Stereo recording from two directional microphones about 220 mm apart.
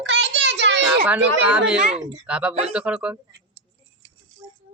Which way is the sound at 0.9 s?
5° right (ahead or behind).